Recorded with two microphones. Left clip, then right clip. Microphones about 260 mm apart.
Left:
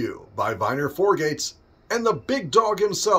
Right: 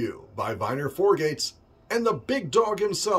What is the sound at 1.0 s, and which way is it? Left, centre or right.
Speech, centre.